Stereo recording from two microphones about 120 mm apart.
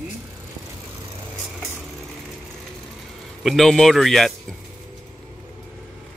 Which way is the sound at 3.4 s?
Centre (ahead or behind).